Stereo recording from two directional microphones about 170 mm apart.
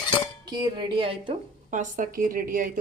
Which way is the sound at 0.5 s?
25° right (ahead or behind).